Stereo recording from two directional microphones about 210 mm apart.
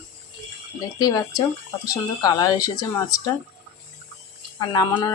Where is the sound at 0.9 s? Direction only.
15° left (ahead or behind).